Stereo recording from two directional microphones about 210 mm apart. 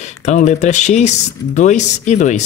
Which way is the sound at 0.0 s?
35° left (ahead or behind).